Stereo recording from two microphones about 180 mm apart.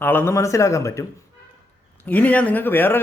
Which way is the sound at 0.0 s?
10° left (ahead or behind).